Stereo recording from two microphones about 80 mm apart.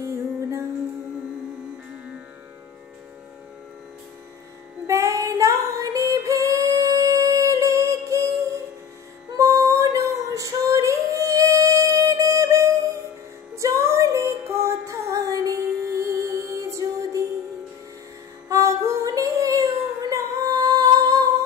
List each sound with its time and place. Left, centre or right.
0.0 s music: right
4.8 s female singing: right
9.4 s female singing: right
13.6 s music: right
18.5 s female singing: right